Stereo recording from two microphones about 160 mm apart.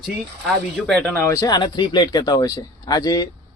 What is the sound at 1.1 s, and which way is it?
A man's voice, 20° left (ahead or behind).